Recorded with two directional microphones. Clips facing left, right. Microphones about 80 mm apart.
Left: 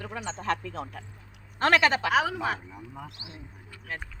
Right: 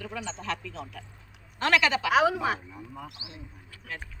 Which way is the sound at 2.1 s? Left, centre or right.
Centre.